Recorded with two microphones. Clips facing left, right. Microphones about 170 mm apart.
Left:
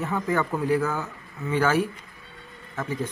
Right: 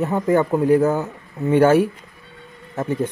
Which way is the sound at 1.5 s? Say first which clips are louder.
Right 9 dB; 55° right (ahead or behind).